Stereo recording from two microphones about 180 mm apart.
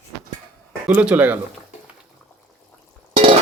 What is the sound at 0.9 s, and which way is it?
Speech, 10° right (ahead or behind).